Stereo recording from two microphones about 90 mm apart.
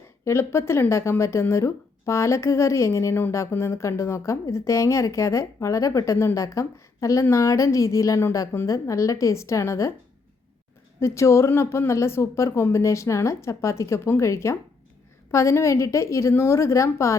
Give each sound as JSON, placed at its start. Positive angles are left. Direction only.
{"t": 0.3, "sound": "a woman's voice", "side_deg": 30}
{"t": 11.0, "sound": "speech", "side_deg": 30}